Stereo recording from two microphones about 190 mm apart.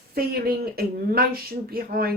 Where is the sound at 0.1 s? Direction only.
55° right (ahead or behind).